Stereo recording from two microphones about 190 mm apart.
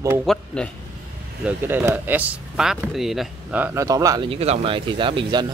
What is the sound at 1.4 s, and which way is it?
Speech, 10° right (ahead or behind).